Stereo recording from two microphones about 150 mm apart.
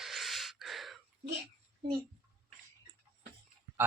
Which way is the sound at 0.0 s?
Centre (ahead or behind).